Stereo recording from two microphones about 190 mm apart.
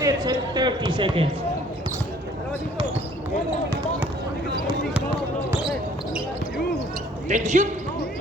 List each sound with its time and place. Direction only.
0.0 s speech: 20° right (ahead or behind)
7.3 s speech: 40° right (ahead or behind)